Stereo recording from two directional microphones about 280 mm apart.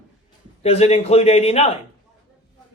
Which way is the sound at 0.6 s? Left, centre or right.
Left.